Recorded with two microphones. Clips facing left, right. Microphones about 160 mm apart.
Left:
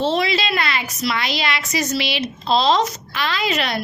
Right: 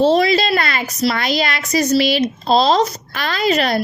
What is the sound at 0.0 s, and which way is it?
A woman's voice, 40° right (ahead or behind).